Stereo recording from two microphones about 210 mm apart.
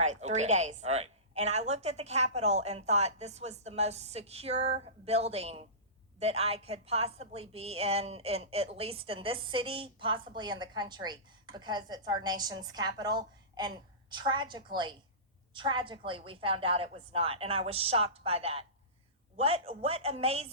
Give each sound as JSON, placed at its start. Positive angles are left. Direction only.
{"t": 0.0, "sound": "a woman's voice", "side_deg": -35}